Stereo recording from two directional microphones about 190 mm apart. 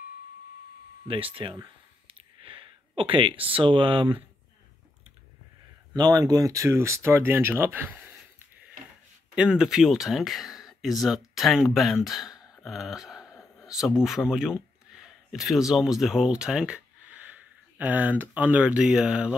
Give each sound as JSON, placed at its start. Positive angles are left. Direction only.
{"t": 1.0, "sound": "a sound", "side_deg": -30}
{"t": 3.0, "sound": "speech", "side_deg": -30}
{"t": 5.9, "sound": "speech", "side_deg": -20}